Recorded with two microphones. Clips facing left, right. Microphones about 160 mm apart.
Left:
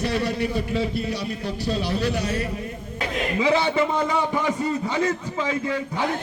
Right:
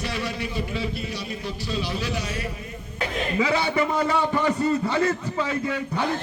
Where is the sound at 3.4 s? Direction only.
20° left (ahead or behind).